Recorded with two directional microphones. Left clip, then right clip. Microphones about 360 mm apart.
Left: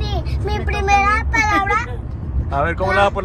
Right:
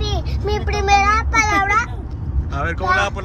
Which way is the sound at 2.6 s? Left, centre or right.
Centre.